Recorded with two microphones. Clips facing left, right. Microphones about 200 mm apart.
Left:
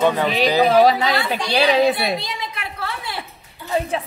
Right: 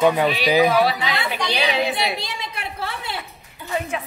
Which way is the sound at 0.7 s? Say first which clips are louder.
Left 5 dB; 40° left (ahead or behind).